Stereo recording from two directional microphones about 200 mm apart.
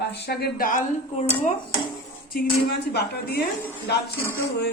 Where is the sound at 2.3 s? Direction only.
50° left (ahead or behind).